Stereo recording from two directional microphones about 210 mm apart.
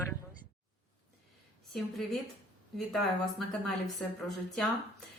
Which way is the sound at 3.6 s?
Centre (ahead or behind).